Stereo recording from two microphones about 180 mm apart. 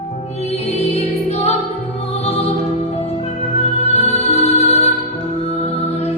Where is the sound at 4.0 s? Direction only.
35° left (ahead or behind).